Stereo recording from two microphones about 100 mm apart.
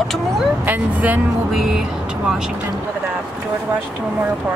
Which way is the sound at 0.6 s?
15° right (ahead or behind).